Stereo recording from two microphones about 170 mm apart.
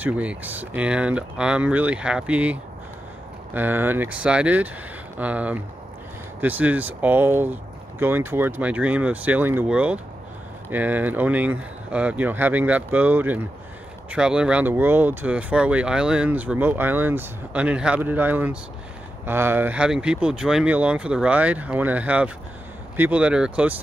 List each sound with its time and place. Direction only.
0.0 s speech: 10° right (ahead or behind)